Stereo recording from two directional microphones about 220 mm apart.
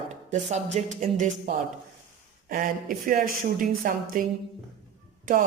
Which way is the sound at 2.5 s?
40° right (ahead or behind).